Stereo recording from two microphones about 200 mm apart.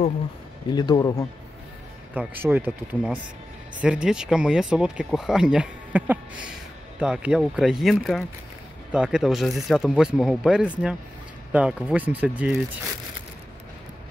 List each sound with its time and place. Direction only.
0.7 s speech: 20° left (ahead or behind)
2.1 s speech: 10° right (ahead or behind)